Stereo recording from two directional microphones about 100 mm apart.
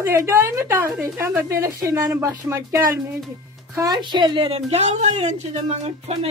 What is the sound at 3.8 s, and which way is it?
A woman's voice, 45° right (ahead or behind).